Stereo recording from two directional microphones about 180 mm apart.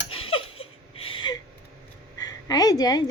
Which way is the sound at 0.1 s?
30° left (ahead or behind).